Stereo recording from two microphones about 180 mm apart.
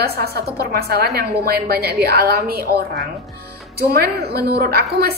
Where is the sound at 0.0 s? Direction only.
60° right (ahead or behind).